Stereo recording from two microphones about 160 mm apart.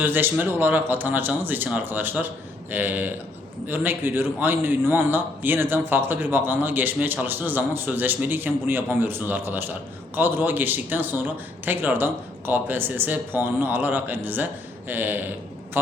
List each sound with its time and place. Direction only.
0.0 s a man's voice: 10° right (ahead or behind)